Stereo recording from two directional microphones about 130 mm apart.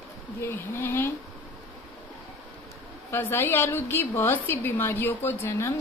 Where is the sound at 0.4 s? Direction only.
20° left (ahead or behind).